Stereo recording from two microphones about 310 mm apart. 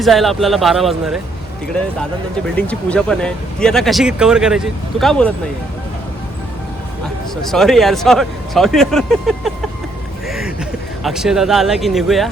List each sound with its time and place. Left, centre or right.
0.0 s speech: centre
2.6 s speech: centre
7.5 s speech: centre
11.0 s speech: centre